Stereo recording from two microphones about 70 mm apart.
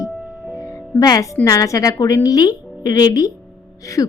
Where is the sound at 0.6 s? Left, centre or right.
Left.